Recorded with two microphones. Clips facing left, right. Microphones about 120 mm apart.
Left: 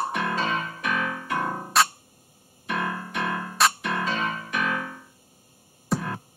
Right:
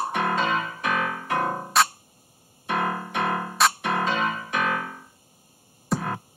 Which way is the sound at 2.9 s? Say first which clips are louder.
Right 3 dB; 30° right (ahead or behind).